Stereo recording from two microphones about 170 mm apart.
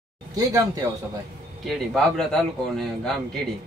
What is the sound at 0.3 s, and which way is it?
Speech, 20° right (ahead or behind).